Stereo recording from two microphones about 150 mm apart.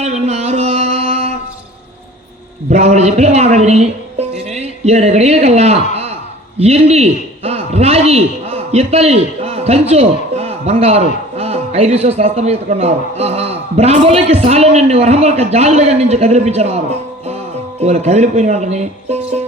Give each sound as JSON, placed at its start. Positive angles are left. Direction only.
{"t": 0.0, "sound": "music", "side_deg": -45}
{"t": 2.6, "sound": "a man's voice", "side_deg": -50}